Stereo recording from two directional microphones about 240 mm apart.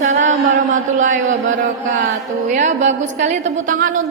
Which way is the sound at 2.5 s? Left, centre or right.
Right.